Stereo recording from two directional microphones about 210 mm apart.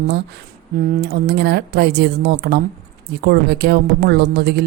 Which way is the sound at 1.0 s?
55° right (ahead or behind).